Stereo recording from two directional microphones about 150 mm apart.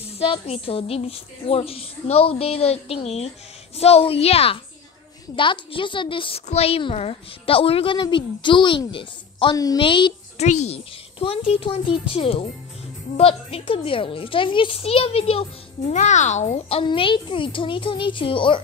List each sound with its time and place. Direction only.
0.2 s a woman's voice: 40° left (ahead or behind)
10.4 s a woman's voice: 50° left (ahead or behind)
15.9 s a woman's voice: 55° left (ahead or behind); by 18.6 s 35° left (ahead or behind)